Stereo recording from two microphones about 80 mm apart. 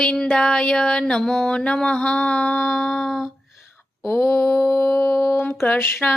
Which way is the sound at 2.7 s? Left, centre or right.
Centre.